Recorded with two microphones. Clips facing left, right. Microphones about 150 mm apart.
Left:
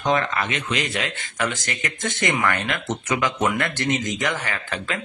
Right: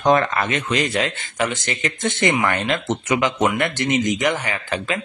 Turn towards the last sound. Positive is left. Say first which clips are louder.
# right 4 dB
turn(degrees=-15)  # may be behind; listen again after turning